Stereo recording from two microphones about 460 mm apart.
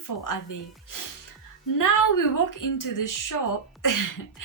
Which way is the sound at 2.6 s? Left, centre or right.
Left.